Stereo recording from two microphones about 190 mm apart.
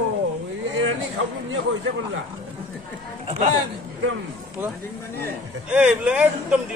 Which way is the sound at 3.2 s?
35° right (ahead or behind).